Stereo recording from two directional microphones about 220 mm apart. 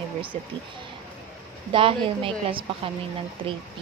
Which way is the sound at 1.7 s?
25° right (ahead or behind).